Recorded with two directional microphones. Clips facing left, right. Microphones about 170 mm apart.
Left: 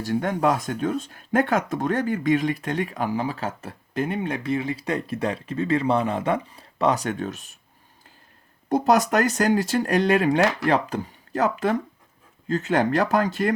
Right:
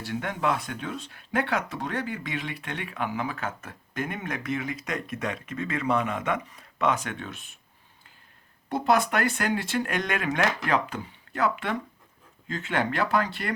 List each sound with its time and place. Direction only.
0.0 s speech: 45° left (ahead or behind)
8.7 s speech: 40° left (ahead or behind)